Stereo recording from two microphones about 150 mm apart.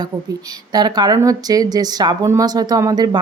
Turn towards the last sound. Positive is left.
turn(degrees=-25)  # may be behind; listen again after turning